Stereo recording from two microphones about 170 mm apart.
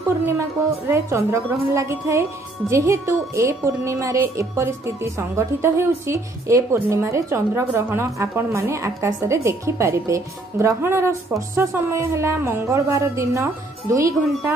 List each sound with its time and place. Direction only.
0.8 s speech: 15° right (ahead or behind)